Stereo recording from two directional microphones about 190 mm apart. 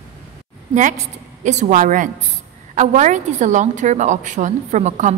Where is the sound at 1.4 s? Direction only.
40° right (ahead or behind).